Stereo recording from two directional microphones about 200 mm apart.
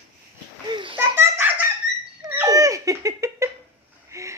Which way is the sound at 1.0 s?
10° right (ahead or behind).